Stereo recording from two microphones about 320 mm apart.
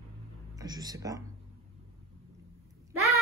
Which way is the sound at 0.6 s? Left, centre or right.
Centre.